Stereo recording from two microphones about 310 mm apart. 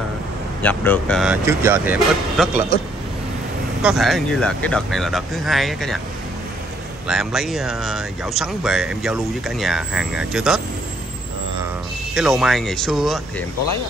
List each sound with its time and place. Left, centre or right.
0.6 s speech: centre
3.8 s speech: centre
7.1 s speech: centre
12.1 s speech: centre